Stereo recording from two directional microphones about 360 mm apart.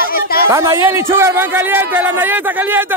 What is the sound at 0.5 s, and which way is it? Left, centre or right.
A man's voice, centre.